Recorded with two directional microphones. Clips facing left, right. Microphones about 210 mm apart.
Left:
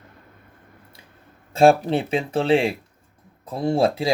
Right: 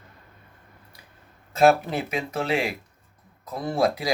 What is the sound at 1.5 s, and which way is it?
Speech, 30° left (ahead or behind).